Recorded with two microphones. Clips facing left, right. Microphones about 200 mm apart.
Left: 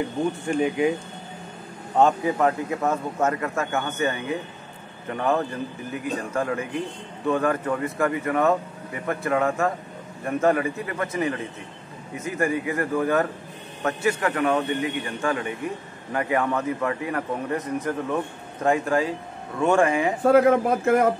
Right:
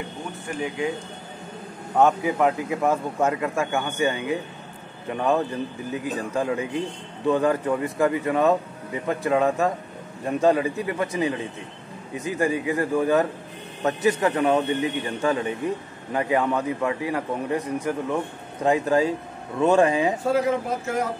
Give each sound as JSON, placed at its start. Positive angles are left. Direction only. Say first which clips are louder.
{"t": 0.5, "sound": "speech", "louder": "left 4 dB", "side_deg": 25}
{"t": 2.0, "sound": "speech", "louder": "even", "side_deg": -10}
{"t": 20.2, "sound": "speech", "louder": "left 5 dB", "side_deg": 55}